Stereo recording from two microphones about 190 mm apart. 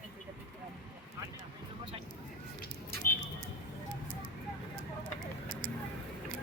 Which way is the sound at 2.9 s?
55° right (ahead or behind).